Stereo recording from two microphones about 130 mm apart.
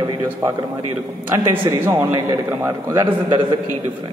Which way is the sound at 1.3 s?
25° right (ahead or behind).